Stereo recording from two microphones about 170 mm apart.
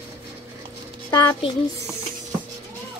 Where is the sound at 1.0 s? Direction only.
20° left (ahead or behind).